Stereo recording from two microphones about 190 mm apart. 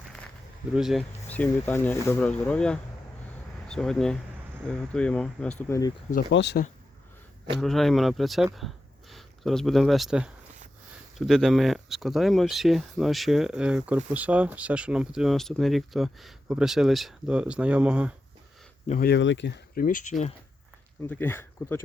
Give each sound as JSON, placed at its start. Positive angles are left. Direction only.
{"t": 0.7, "sound": "speech", "side_deg": 0}
{"t": 6.3, "sound": "speech", "side_deg": 65}
{"t": 7.6, "sound": "speech", "side_deg": 0}
{"t": 19.0, "sound": "speech", "side_deg": 70}
{"t": 21.1, "sound": "speech", "side_deg": 10}